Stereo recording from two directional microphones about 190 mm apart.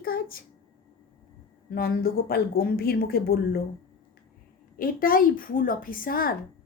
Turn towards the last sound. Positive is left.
turn(degrees=50)  # may be behind; listen again after turning